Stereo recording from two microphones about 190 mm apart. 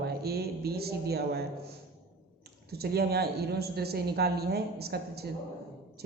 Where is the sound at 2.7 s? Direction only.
55° right (ahead or behind).